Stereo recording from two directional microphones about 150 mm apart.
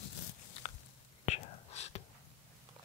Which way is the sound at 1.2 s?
45° left (ahead or behind).